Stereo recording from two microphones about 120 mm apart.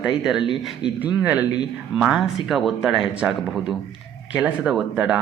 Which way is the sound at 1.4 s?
35° left (ahead or behind).